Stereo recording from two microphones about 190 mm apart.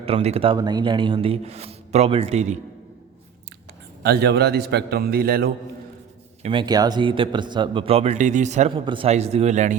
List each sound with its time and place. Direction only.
0.0 s speech: 30° right (ahead or behind)
4.0 s a man's voice: 60° right (ahead or behind)
6.4 s speech: 25° right (ahead or behind)
8.7 s speech: 25° right (ahead or behind)